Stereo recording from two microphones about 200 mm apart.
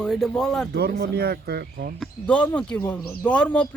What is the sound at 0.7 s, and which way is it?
Speech, 55° right (ahead or behind).